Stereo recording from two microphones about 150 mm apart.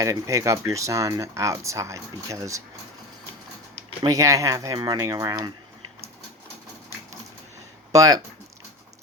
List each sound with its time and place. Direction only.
0.0 s speech: 20° right (ahead or behind)
4.0 s speech: 20° right (ahead or behind)
7.9 s speech: 25° right (ahead or behind)